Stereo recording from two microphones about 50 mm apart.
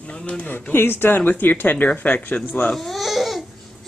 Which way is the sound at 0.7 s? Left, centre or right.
Left.